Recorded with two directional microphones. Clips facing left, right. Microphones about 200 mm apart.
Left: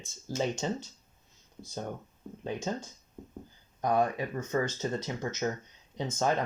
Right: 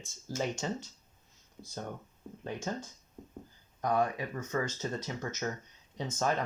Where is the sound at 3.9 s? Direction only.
30° left (ahead or behind).